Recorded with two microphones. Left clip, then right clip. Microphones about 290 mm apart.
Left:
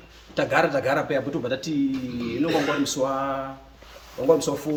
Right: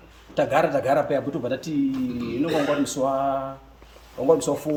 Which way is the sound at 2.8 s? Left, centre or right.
Centre.